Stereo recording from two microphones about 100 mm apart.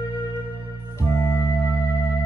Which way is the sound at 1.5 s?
30° left (ahead or behind).